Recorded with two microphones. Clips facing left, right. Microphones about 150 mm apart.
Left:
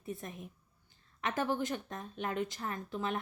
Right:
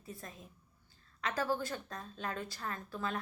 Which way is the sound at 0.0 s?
20° left (ahead or behind).